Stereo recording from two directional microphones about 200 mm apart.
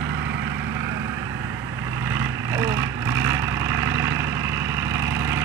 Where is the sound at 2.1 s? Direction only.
15° right (ahead or behind).